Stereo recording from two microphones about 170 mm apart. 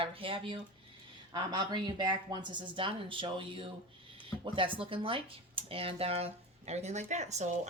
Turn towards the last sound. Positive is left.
turn(degrees=-45)  # may be behind; listen again after turning